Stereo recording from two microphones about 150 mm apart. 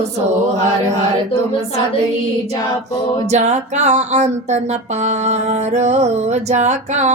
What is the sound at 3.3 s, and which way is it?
Music, 50° right (ahead or behind).